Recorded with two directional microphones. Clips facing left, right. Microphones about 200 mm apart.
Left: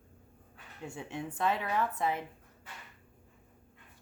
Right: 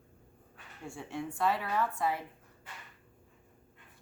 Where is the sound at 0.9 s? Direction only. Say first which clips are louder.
Right 1 dB; 20° left (ahead or behind).